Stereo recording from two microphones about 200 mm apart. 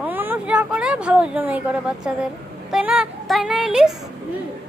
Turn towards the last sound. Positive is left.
turn(degrees=0)  # may be behind; listen again after turning